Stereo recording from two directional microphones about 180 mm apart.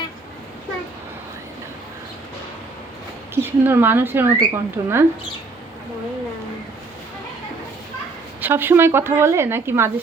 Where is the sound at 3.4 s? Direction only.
10° right (ahead or behind).